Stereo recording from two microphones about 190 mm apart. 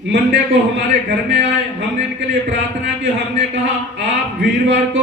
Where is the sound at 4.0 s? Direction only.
70° right (ahead or behind).